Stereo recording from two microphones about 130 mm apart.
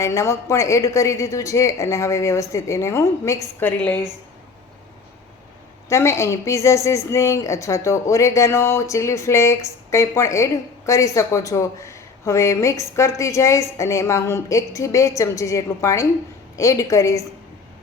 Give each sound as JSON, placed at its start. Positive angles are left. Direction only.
{"t": 0.0, "sound": "a woman's voice", "side_deg": 20}
{"t": 5.9, "sound": "a woman's voice", "side_deg": 20}